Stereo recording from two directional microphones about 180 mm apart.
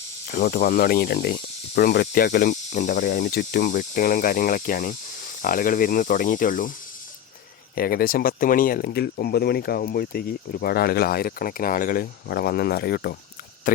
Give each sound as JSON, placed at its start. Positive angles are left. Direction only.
{"t": 0.3, "sound": "speech", "side_deg": 50}
{"t": 7.8, "sound": "speech", "side_deg": 55}
{"t": 13.7, "sound": "speech", "side_deg": 50}